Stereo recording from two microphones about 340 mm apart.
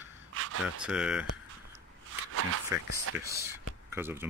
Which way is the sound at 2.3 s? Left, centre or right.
Right.